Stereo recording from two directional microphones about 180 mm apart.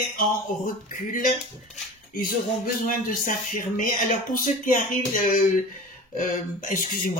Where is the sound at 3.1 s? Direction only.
45° left (ahead or behind).